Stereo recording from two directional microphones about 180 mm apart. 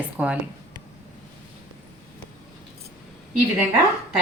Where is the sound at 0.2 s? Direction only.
5° right (ahead or behind).